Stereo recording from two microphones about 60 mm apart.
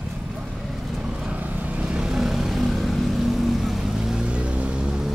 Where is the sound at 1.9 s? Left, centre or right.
Centre.